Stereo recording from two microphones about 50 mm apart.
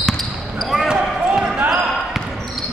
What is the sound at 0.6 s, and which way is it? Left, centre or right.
Basketball bounce, centre.